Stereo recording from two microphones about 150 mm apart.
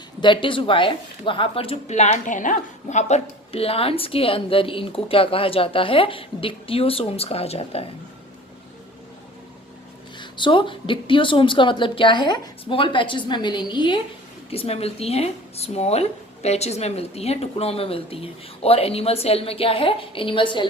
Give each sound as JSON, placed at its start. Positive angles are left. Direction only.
{"t": 0.2, "sound": "speech", "side_deg": 35}
{"t": 10.2, "sound": "speech", "side_deg": 30}
{"t": 14.5, "sound": "speech", "side_deg": 40}